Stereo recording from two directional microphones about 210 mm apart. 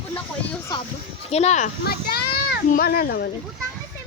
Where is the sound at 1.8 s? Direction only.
50° left (ahead or behind).